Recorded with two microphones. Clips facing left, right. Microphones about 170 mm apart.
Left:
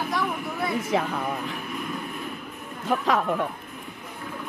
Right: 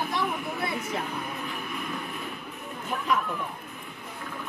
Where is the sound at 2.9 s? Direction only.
90° left.